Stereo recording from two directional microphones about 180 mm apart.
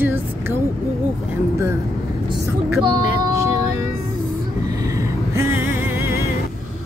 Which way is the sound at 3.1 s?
20° right (ahead or behind).